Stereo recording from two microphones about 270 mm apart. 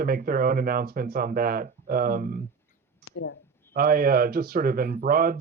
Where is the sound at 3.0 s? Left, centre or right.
Left.